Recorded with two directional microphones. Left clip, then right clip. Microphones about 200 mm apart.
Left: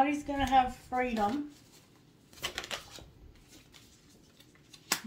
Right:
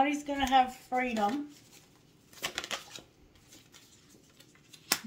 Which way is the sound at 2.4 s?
25° right (ahead or behind).